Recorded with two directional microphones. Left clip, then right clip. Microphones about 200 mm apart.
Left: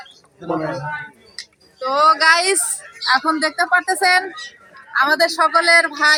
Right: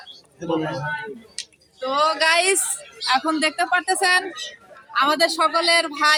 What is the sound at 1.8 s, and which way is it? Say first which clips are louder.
A man's voice: left 6 dB; 5° right (ahead or behind).